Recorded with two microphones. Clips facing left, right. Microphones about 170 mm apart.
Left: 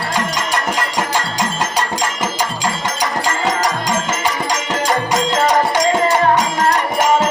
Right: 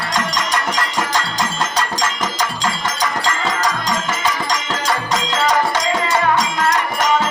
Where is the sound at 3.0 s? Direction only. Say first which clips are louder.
Left 2 dB; 35° left (ahead or behind).